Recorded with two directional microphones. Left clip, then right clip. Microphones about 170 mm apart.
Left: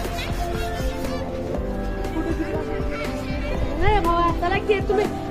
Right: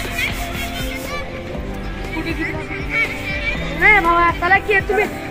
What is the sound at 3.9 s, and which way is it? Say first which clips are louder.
Speech: right 5 dB; 20° right (ahead or behind).